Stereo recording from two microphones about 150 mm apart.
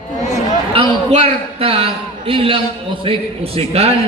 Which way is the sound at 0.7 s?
35° right (ahead or behind).